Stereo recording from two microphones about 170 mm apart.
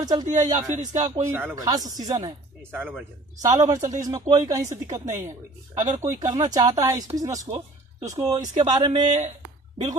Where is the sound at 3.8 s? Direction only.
45° right (ahead or behind).